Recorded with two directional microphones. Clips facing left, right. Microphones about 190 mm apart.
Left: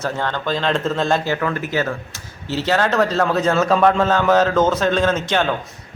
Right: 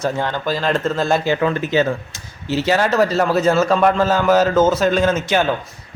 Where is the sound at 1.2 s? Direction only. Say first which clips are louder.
Right 4 dB; 20° right (ahead or behind).